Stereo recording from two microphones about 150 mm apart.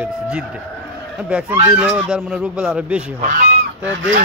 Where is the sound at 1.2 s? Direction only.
10° right (ahead or behind).